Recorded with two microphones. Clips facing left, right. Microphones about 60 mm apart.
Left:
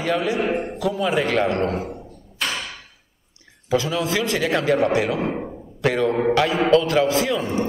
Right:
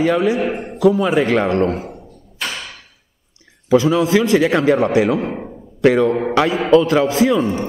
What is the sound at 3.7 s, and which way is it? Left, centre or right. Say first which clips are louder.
A man's voice: right 8 dB; right.